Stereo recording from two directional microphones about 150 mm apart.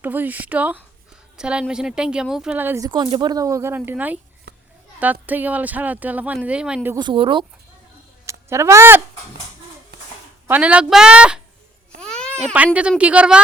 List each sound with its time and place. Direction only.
0.0 s speech: 10° right (ahead or behind)
2.8 s speech: 30° right (ahead or behind); by 4.2 s 10° right (ahead or behind)
5.2 s speech: 10° right (ahead or behind)
6.9 s speech: 30° right (ahead or behind)
8.3 s speech: 20° right (ahead or behind)
10.5 s speech: 10° right (ahead or behind)
11.9 s babbling: 5° left (ahead or behind)
12.5 s speech: 10° right (ahead or behind)